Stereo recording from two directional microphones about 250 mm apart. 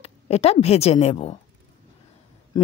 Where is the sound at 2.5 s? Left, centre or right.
Centre.